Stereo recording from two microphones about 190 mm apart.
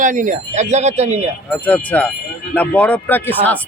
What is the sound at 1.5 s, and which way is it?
Speech, 10° left (ahead or behind).